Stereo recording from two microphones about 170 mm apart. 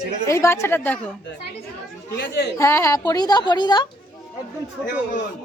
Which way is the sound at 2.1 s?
80° left.